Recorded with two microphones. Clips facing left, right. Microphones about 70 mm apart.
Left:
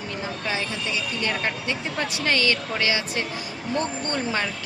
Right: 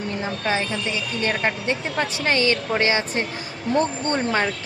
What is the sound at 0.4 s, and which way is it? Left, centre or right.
Speech, right.